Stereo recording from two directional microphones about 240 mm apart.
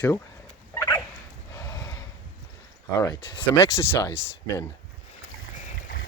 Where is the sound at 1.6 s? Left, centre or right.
Centre.